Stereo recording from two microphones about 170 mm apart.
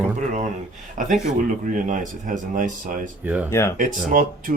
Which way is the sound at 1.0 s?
50° right (ahead or behind).